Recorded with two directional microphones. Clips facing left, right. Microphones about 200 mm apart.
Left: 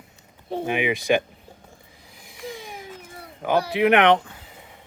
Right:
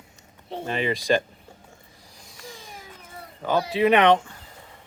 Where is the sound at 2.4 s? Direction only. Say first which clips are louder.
Left 8 dB; 20° left (ahead or behind).